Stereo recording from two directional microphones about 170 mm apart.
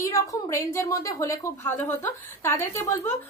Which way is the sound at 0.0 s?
20° left (ahead or behind).